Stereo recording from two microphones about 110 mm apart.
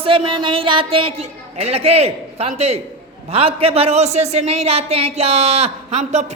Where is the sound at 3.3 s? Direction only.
60° right (ahead or behind); by 6.2 s 90° right.